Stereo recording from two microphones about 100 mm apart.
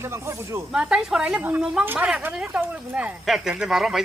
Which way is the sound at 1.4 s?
20° right (ahead or behind).